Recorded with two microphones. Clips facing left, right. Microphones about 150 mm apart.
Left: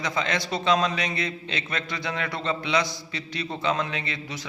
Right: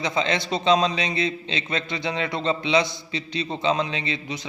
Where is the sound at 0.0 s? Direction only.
25° right (ahead or behind).